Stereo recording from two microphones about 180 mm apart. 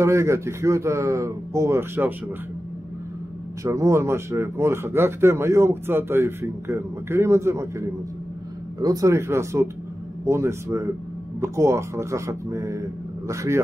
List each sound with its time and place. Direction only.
0.0 s speech: 15° right (ahead or behind)
3.6 s speech: 15° right (ahead or behind)
8.7 s speech: 20° right (ahead or behind)